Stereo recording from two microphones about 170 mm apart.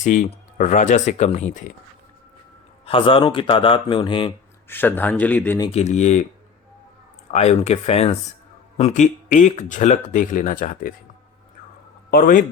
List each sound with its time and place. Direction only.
0.0 s speech: 50° left (ahead or behind)
2.8 s a man's voice: 30° left (ahead or behind)
4.7 s speech: 10° left (ahead or behind)
5.7 s speech: 40° left (ahead or behind)
7.3 s speech: 40° left (ahead or behind)
12.1 s speech: 55° left (ahead or behind)